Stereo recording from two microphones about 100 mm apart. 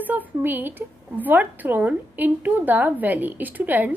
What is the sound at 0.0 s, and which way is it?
A woman's voice, 20° right (ahead or behind).